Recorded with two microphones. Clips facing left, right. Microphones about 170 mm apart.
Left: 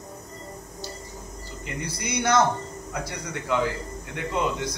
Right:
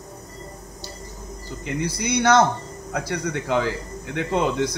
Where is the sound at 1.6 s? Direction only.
85° right.